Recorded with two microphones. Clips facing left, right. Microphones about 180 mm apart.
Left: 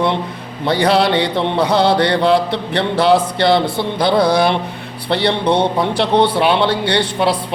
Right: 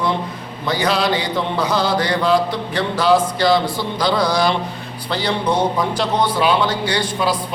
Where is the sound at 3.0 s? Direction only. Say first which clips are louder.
Left 1 dB; 65° left (ahead or behind).